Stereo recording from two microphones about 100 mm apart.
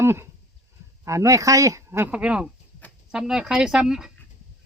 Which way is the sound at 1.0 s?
30° right (ahead or behind).